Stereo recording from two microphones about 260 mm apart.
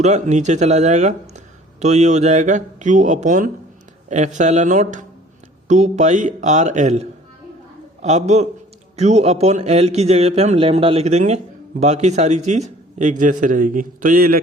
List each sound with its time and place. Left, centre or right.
0.0 s a man's voice: right